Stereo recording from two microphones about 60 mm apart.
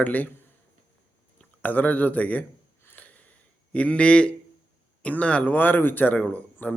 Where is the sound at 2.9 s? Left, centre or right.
Left.